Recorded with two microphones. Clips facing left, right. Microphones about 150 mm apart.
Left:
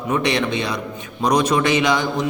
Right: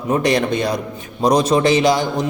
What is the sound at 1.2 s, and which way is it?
A man's voice, 35° right (ahead or behind).